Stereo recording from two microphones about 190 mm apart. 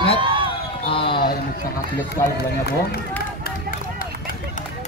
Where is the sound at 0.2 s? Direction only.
25° right (ahead or behind).